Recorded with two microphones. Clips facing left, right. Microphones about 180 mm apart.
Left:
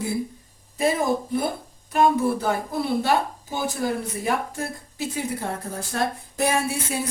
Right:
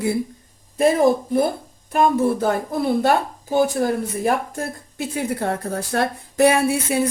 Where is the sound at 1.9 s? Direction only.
50° right (ahead or behind).